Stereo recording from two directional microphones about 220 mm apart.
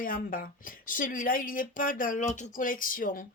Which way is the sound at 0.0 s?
40° left (ahead or behind).